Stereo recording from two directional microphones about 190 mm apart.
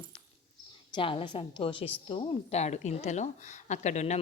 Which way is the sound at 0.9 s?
25° left (ahead or behind).